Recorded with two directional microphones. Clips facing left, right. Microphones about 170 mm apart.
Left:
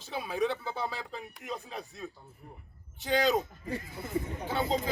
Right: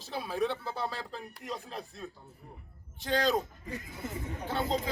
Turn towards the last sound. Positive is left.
turn(degrees=0)  # may be behind; listen again after turning